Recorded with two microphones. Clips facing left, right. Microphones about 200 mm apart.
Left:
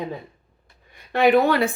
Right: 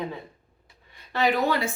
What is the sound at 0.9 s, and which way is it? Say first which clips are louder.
Speech: left 8 dB; 55° left (ahead or behind).